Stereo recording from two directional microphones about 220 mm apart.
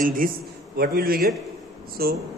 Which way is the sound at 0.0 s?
40° right (ahead or behind).